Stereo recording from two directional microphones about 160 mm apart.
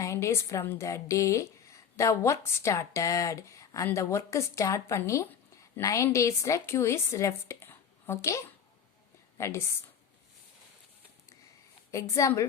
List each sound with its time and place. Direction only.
0.0 s a woman's voice: 20° left (ahead or behind)
11.9 s a woman's voice: 20° left (ahead or behind)